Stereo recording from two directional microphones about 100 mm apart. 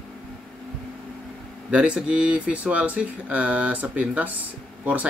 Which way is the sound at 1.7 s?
10° right (ahead or behind).